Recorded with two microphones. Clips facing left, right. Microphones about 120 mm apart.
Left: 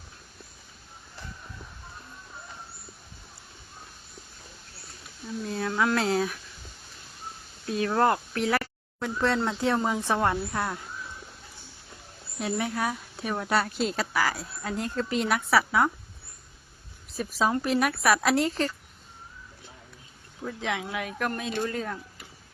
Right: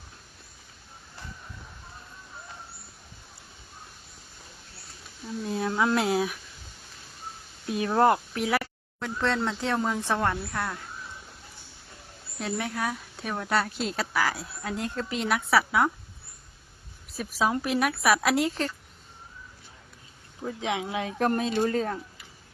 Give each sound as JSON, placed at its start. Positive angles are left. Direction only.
{"t": 5.5, "sound": "speech", "side_deg": -20}
{"t": 7.9, "sound": "speech", "side_deg": -20}
{"t": 8.3, "sound": "speech", "side_deg": -5}
{"t": 12.4, "sound": "speech", "side_deg": 5}
{"t": 17.2, "sound": "speech", "side_deg": -5}
{"t": 20.4, "sound": "speech", "side_deg": -20}